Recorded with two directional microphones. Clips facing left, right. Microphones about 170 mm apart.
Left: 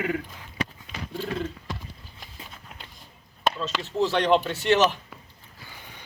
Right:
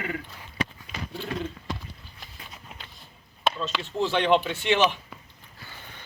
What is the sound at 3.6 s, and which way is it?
Speech, centre (ahead or behind).